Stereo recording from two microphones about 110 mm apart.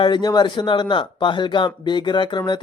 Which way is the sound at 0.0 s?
40° left (ahead or behind).